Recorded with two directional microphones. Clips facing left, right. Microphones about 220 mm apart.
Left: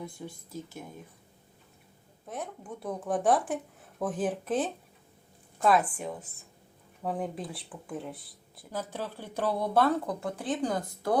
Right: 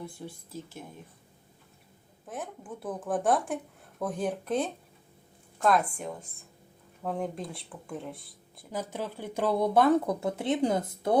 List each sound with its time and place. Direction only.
0.2 s speech: 5° left (ahead or behind)
2.2 s speech: centre (ahead or behind)
8.7 s speech: 15° right (ahead or behind)